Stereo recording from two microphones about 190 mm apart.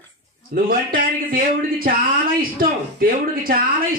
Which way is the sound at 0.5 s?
50° right (ahead or behind).